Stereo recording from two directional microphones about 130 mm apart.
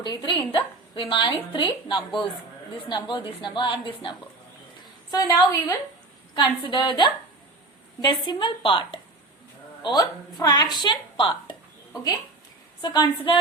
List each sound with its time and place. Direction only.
0.0 s a woman's voice: 35° left (ahead or behind)
5.1 s a woman's voice: 25° left (ahead or behind)
6.3 s a woman's voice: 35° left (ahead or behind)
12.8 s a woman's voice: 35° left (ahead or behind)